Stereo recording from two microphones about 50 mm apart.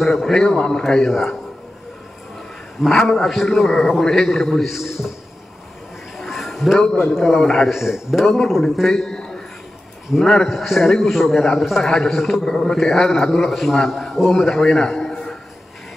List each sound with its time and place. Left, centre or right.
0.0 s a man's voice: centre
0.3 s a man's voice: centre
2.8 s a man's voice: centre
6.1 s a sound: centre
7.2 s a man's voice: centre
7.7 s a man's voice: centre
10.1 s a man's voice: centre
14.6 s a sound: centre